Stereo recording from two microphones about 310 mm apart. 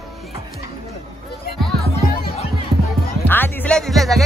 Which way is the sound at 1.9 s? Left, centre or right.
Centre.